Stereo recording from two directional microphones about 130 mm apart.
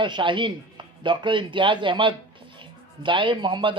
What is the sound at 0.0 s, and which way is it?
Speech, 35° right (ahead or behind).